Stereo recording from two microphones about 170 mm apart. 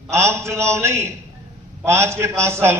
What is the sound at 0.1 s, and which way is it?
A man's voice, 15° right (ahead or behind).